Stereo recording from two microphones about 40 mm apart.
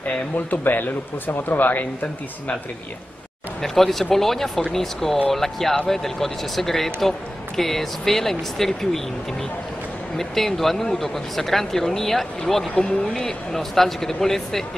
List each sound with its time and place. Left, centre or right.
0.0 s speech: left
3.6 s speech: centre
10.1 s speech: centre
12.7 s speech: left
13.2 s speech: centre